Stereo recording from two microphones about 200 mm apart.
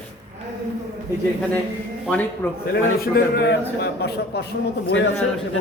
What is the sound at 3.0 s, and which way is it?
A man's voice, 55° left (ahead or behind).